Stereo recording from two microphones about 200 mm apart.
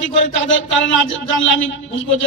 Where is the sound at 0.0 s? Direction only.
70° left (ahead or behind).